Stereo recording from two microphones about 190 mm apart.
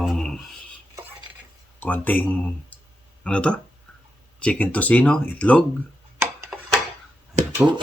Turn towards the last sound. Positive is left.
turn(degrees=-40)  # may be behind; listen again after turning